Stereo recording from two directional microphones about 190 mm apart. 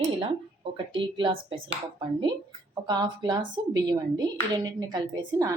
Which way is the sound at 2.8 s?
20° right (ahead or behind).